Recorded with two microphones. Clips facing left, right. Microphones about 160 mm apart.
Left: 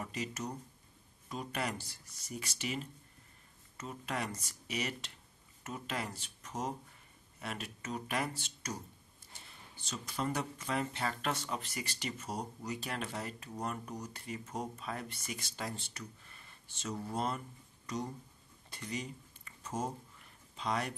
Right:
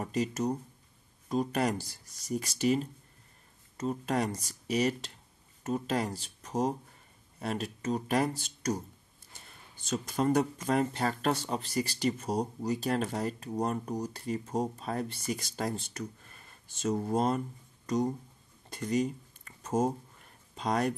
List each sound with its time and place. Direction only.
0.0 s speech: 40° right (ahead or behind)
9.8 s speech: 45° right (ahead or behind)
18.7 s a sound: 45° right (ahead or behind)
20.5 s speech: 45° right (ahead or behind)